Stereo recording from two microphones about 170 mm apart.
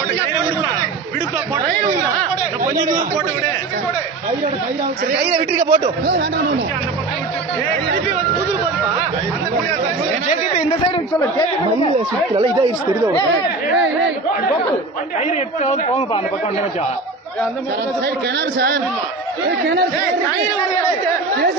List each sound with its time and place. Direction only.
5.3 s a man's voice: 40° right (ahead or behind)
11.1 s speech: 30° left (ahead or behind)
15.2 s a woman's voice: 40° left (ahead or behind)